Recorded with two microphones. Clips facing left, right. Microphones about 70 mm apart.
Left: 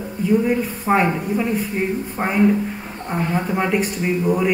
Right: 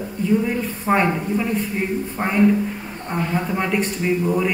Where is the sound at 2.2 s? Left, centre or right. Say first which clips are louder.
Even; centre.